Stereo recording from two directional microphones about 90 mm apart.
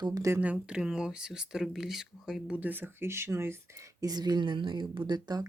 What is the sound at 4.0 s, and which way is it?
Speech, 45° right (ahead or behind).